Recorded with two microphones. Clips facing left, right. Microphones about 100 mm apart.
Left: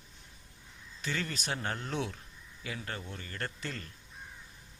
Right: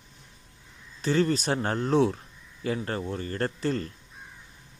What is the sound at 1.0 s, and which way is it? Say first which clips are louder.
Speech: right 13 dB; 35° right (ahead or behind).